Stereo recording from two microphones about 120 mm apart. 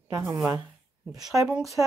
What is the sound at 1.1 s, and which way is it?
Speech, 30° right (ahead or behind).